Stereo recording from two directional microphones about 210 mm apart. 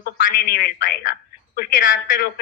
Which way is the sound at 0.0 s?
45° left (ahead or behind).